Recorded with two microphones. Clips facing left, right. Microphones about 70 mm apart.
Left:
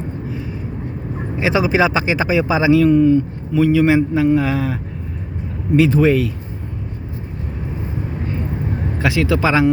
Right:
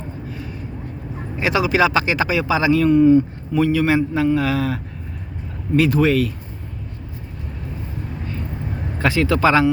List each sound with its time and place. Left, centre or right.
1.4 s speech: centre
2.7 s a man's voice: centre
3.0 s speech: right
3.7 s speech: centre
9.0 s speech: centre